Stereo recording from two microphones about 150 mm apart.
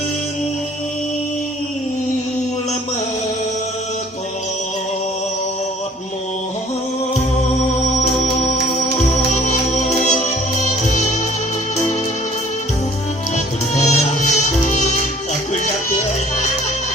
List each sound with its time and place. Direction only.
9.0 s music: 50° left (ahead or behind)
13.3 s music: 50° left (ahead or behind)